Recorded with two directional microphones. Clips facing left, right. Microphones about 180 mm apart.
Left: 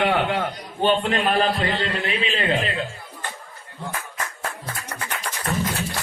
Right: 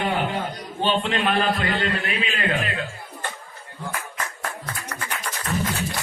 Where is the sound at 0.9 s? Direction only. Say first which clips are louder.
Left 2 dB; 45° left (ahead or behind).